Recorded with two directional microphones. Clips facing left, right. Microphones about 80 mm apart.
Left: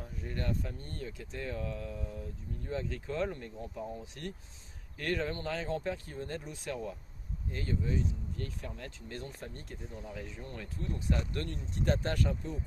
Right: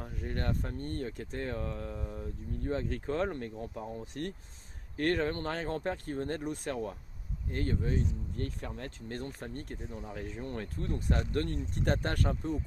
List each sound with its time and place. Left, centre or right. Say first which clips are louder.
0.0 s speech: right 2 dB; right